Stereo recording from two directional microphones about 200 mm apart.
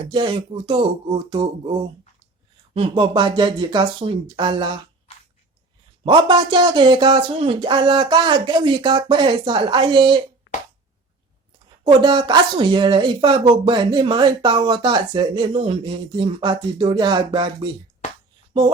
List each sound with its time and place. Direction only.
0.1 s speech: 25° right (ahead or behind)
2.7 s speech: 25° right (ahead or behind)
6.1 s speech: 25° right (ahead or behind)
11.8 s speech: 25° right (ahead or behind)